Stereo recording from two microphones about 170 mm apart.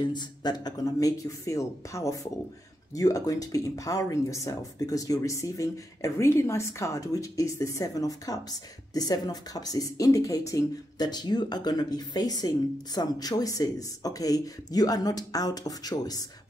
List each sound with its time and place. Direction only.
0.0 s speech: 25° left (ahead or behind)